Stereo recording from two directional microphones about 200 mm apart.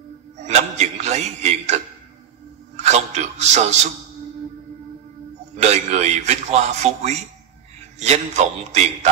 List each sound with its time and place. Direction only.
0.4 s a man's voice: 35° right (ahead or behind)
5.6 s a man's voice: 35° right (ahead or behind)